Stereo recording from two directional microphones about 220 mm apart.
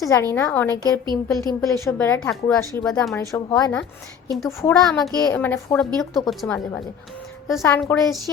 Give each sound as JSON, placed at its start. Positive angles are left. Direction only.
{"t": 0.0, "sound": "speech", "side_deg": 15}
{"t": 1.0, "sound": "speech", "side_deg": -20}
{"t": 1.6, "sound": "speech", "side_deg": 15}
{"t": 4.9, "sound": "a woman's voice", "side_deg": 0}